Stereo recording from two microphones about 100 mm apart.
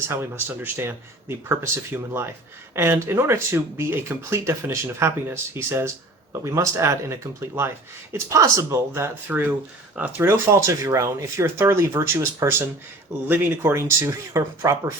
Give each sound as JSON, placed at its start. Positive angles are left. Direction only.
{"t": 0.1, "sound": "speech", "side_deg": -20}